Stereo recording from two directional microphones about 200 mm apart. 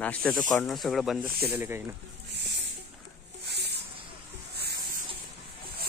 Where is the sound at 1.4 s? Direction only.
10° right (ahead or behind).